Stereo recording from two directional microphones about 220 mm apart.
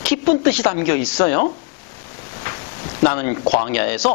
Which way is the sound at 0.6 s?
25° left (ahead or behind).